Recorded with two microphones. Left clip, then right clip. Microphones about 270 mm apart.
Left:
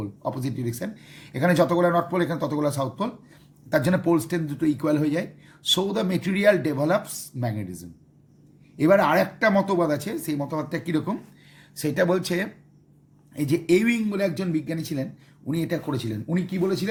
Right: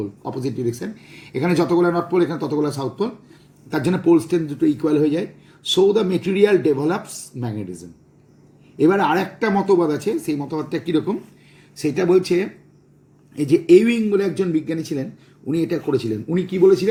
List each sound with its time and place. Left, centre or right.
0.3 s speech: left
13.7 s speech: left